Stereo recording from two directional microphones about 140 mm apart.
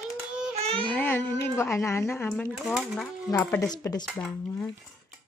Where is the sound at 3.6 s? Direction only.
25° left (ahead or behind).